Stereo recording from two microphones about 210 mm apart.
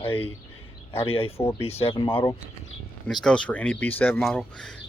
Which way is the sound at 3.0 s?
5° left (ahead or behind).